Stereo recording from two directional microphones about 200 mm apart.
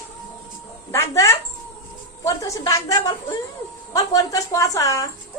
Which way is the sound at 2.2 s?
15° left (ahead or behind).